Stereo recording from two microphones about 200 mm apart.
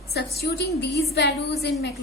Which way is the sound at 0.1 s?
55° left (ahead or behind).